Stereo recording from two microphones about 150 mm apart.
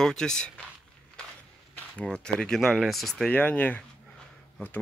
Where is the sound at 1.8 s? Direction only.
5° left (ahead or behind).